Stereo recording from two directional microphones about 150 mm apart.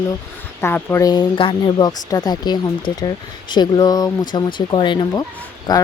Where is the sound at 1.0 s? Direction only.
30° left (ahead or behind).